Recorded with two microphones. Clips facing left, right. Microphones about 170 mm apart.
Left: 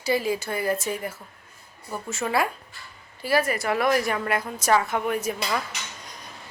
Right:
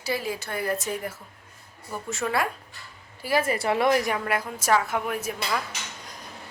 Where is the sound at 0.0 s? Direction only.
Centre (ahead or behind).